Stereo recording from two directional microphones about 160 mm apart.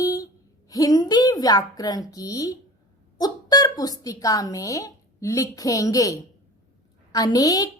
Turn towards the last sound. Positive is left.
turn(degrees=20)  # may be behind; listen again after turning